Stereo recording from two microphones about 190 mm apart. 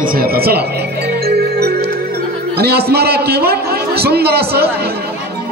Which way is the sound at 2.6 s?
55° right (ahead or behind).